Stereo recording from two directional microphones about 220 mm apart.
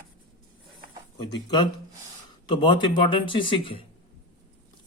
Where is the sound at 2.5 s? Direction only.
20° left (ahead or behind).